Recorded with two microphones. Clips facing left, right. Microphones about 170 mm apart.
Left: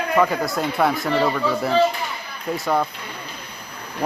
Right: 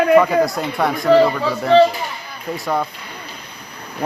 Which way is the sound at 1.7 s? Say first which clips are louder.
Right 8 dB; 90° right.